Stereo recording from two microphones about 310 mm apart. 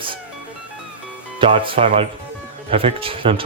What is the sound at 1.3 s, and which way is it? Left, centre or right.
Speech, centre.